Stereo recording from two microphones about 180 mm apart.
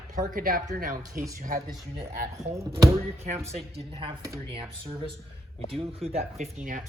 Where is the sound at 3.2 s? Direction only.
35° right (ahead or behind).